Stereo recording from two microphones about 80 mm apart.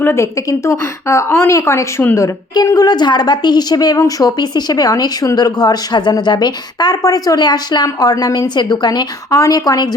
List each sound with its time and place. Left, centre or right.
0.0 s a woman's voice: left
2.6 s speech: left
3.9 s speech: left
4.4 s speech: left